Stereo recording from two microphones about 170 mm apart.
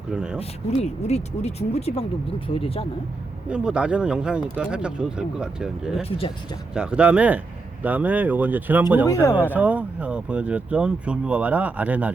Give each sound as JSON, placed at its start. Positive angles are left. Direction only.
{"t": 0.1, "sound": "speech", "side_deg": -5}
{"t": 0.3, "sound": "speech", "side_deg": 40}
{"t": 3.5, "sound": "speech", "side_deg": -5}
{"t": 6.0, "sound": "speech", "side_deg": 35}
{"t": 6.7, "sound": "speech", "side_deg": -5}